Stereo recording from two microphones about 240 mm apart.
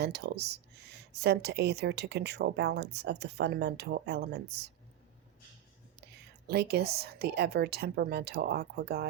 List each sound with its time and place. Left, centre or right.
0.0 s speech: right
6.1 s a woman's voice: right